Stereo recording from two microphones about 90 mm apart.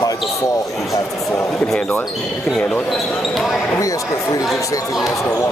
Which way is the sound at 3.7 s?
40° left (ahead or behind).